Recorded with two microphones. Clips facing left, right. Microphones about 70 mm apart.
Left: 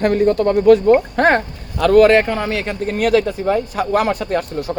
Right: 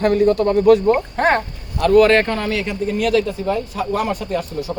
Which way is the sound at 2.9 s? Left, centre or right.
Left.